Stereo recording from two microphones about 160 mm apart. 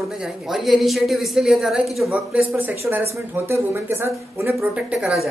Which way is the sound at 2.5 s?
15° right (ahead or behind).